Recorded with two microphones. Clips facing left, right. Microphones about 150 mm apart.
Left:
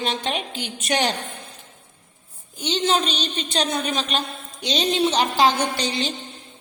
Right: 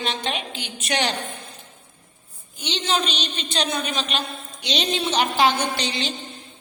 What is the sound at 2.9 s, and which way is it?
A woman's voice, 45° left (ahead or behind).